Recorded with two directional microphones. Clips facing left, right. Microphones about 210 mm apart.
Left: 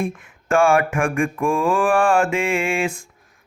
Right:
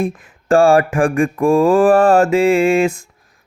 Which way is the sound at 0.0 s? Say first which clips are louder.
Right 5 dB; 35° right (ahead or behind).